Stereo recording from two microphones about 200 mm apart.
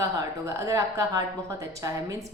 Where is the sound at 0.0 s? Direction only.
15° right (ahead or behind).